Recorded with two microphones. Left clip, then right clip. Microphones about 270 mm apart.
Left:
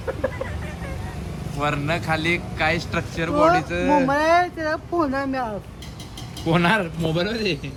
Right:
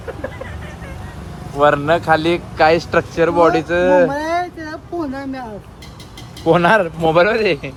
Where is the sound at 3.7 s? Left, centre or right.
Centre.